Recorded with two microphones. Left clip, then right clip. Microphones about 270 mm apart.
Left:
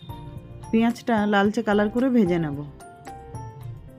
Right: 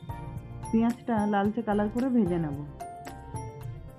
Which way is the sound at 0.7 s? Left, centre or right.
Left.